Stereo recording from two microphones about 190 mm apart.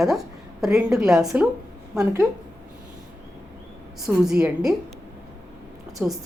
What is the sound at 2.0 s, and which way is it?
Speech, 15° right (ahead or behind).